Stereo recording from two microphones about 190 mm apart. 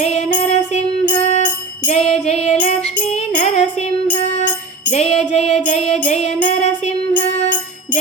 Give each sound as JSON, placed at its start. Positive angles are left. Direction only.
{"t": 0.0, "sound": "music", "side_deg": 35}